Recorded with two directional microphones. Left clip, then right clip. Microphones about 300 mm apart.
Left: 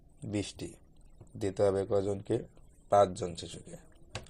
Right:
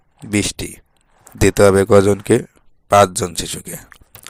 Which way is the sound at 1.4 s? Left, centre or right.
Right.